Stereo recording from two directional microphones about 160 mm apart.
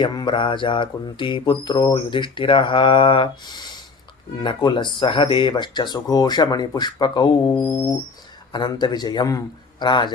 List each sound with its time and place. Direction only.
0.0 s speech: 30° left (ahead or behind)